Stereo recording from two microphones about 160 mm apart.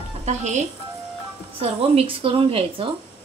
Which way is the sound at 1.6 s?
35° right (ahead or behind).